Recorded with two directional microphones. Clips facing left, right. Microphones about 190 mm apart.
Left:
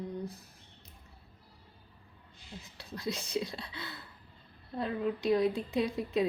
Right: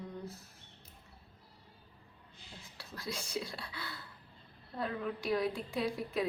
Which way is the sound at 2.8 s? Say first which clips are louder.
Left 5 dB; 20° left (ahead or behind).